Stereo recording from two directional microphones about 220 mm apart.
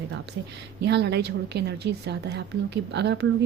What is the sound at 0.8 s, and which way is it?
A woman's voice, 50° right (ahead or behind).